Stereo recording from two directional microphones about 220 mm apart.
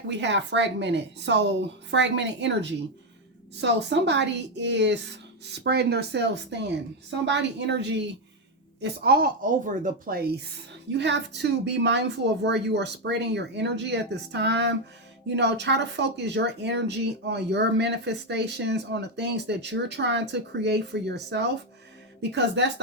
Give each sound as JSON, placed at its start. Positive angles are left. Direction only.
{"t": 0.1, "sound": "speech", "side_deg": -55}
{"t": 10.9, "sound": "speech", "side_deg": -50}